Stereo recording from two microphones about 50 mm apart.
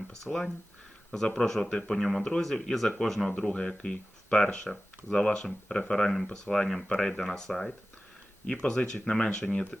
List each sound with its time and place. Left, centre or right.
0.1 s speech: centre
3.3 s speech: centre